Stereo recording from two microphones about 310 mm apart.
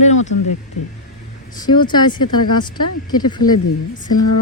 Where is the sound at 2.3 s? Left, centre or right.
Left.